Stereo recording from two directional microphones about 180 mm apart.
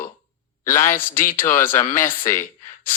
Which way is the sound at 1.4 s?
50° left (ahead or behind).